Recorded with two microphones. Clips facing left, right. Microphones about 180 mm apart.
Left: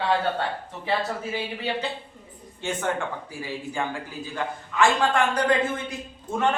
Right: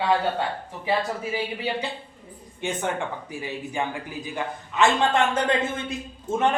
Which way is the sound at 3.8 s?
20° right (ahead or behind).